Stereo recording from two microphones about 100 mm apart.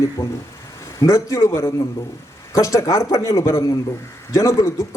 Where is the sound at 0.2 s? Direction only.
20° left (ahead or behind).